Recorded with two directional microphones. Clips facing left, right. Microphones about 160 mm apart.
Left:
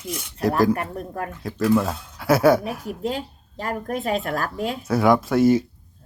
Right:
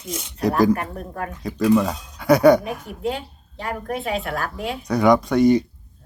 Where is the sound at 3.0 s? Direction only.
40° left (ahead or behind).